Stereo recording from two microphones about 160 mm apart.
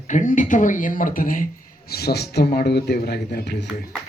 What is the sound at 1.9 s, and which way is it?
Speech, 80° left.